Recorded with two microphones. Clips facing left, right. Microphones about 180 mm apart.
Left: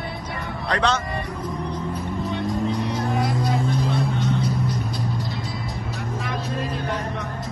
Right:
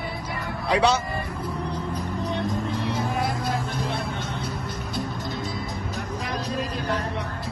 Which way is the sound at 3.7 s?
55° right (ahead or behind).